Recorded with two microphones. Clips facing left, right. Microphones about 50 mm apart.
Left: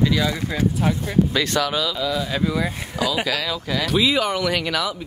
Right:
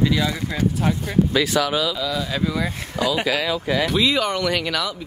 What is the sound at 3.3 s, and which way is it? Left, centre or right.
Speech, centre.